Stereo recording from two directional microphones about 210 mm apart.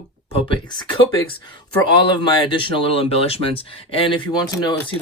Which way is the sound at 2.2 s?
20° left (ahead or behind).